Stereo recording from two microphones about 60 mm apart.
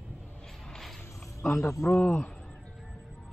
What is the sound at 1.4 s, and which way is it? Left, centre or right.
Speech, left.